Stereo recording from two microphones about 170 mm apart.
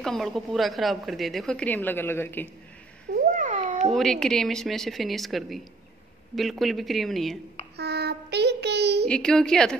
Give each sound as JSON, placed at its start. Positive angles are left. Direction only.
{"t": 0.0, "sound": "a woman's voice", "side_deg": 0}
{"t": 3.2, "sound": "a sound", "side_deg": -50}
{"t": 3.9, "sound": "a woman's voice", "side_deg": 0}
{"t": 7.7, "sound": "child singing", "side_deg": -75}
{"t": 9.0, "sound": "a woman's voice", "side_deg": 5}